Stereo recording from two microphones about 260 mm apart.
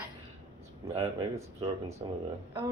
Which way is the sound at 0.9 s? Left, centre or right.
Centre.